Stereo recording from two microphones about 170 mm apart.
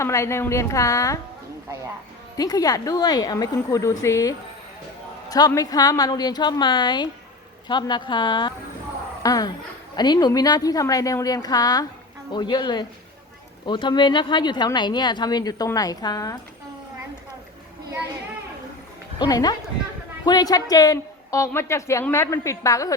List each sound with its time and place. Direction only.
0.0 s a woman's voice: 15° left (ahead or behind)
2.4 s speech: 20° left (ahead or behind)
19.2 s speech: 20° left (ahead or behind)